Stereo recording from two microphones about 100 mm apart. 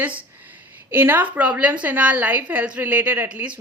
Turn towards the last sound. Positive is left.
turn(degrees=-15)  # may be behind; listen again after turning